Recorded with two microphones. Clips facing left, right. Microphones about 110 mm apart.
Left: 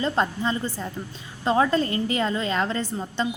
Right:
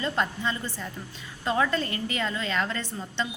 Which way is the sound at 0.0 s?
30° left (ahead or behind).